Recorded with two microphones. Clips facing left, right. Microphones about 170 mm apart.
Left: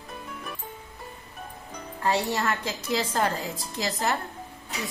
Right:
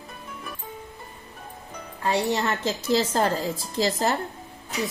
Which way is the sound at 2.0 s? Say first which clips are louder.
Right 2 dB; 20° right (ahead or behind).